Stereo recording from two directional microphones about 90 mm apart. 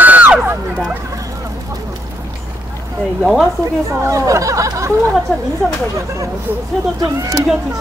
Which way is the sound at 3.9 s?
35° right (ahead or behind).